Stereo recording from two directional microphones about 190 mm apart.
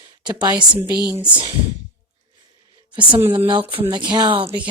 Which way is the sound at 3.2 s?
10° right (ahead or behind).